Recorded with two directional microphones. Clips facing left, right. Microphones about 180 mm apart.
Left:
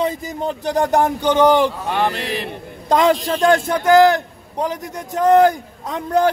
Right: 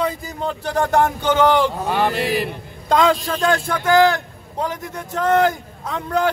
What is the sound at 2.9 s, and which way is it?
A man's voice, 15° left (ahead or behind).